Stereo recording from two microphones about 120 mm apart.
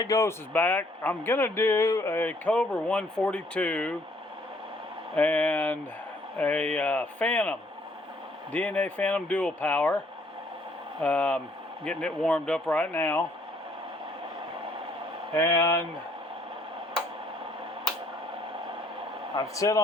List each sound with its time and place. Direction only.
0.0 s speech: 25° left (ahead or behind); by 3.9 s 10° left (ahead or behind)
5.1 s speech: 15° left (ahead or behind)
8.5 s speech: 10° left (ahead or behind)
11.0 s speech: 15° left (ahead or behind)
15.4 s a man's voice: 25° left (ahead or behind)
19.4 s a man's voice: 30° left (ahead or behind)